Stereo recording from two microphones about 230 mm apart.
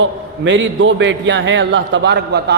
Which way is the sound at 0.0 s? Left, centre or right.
Right.